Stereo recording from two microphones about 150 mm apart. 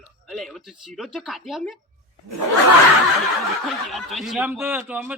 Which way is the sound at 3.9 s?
Centre (ahead or behind).